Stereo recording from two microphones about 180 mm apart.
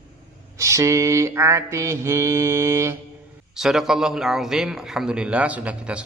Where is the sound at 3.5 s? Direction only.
Centre (ahead or behind).